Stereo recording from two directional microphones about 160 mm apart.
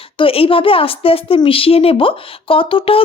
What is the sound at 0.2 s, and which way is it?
A woman's voice, 35° left (ahead or behind).